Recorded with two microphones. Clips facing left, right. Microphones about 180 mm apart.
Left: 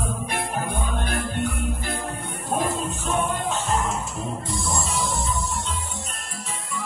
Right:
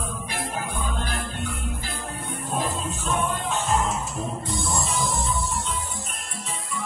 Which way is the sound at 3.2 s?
50° left (ahead or behind).